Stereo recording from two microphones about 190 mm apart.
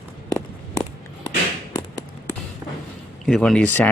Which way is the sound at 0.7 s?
20° left (ahead or behind).